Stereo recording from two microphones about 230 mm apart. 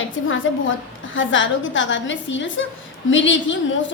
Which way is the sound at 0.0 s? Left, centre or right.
Left.